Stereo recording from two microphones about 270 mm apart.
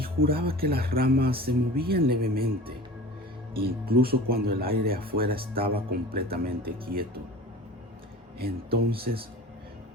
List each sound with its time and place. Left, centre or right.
0.0 s speech: right
8.4 s speech: right